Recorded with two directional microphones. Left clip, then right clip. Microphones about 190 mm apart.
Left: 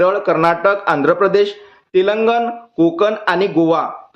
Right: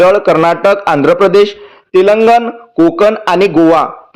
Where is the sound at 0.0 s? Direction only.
35° right (ahead or behind).